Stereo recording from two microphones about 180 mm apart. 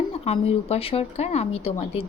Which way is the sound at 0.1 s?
35° left (ahead or behind).